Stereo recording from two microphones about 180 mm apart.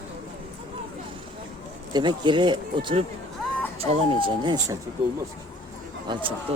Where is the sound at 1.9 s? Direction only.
25° right (ahead or behind).